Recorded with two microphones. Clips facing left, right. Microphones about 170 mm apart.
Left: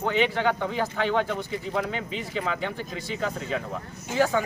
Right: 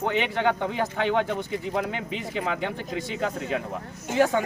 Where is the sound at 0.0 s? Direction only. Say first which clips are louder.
Even; 20° right (ahead or behind).